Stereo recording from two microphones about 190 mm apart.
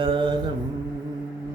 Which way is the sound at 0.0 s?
25° right (ahead or behind).